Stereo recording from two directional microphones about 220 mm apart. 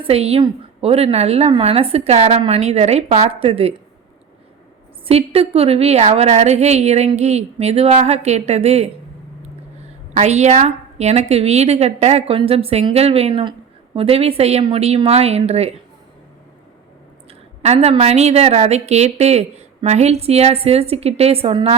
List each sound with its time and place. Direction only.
0.0 s a woman's voice: 25° right (ahead or behind)
5.0 s a woman's voice: 25° right (ahead or behind)
10.2 s a woman's voice: 30° right (ahead or behind)
17.6 s a woman's voice: 30° right (ahead or behind)